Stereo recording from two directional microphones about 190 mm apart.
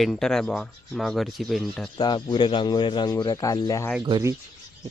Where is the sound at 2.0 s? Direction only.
25° left (ahead or behind).